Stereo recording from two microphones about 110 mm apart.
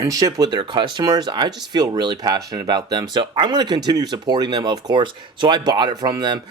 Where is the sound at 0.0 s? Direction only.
30° right (ahead or behind).